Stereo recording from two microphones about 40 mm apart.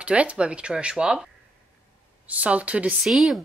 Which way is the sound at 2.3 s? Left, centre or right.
Right.